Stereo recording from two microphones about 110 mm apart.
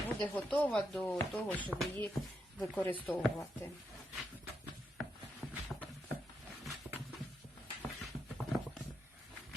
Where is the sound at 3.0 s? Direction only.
10° left (ahead or behind).